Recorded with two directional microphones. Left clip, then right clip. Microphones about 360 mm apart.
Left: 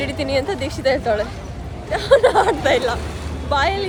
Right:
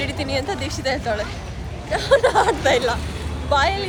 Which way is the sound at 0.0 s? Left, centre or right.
Centre.